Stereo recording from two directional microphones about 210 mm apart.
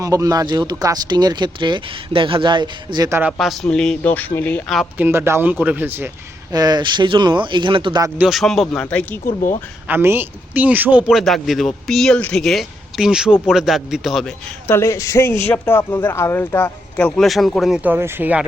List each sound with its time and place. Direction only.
0.0 s speech: 15° right (ahead or behind)
3.3 s a man's voice: centre (ahead or behind); by 8.1 s 20° right (ahead or behind)
8.2 s a man's voice: centre (ahead or behind)
9.2 s speech: 40° left (ahead or behind)
9.8 s a man's voice: 10° right (ahead or behind)
14.8 s speech: 15° left (ahead or behind); by 18.4 s 10° right (ahead or behind)